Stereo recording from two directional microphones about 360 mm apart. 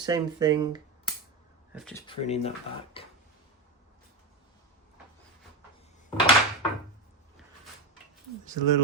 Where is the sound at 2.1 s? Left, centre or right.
Centre.